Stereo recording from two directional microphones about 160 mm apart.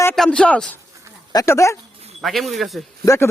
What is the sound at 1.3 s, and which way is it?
Speech, 20° left (ahead or behind).